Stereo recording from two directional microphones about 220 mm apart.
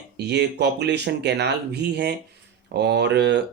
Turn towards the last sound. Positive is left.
turn(degrees=-50)  # may be behind; listen again after turning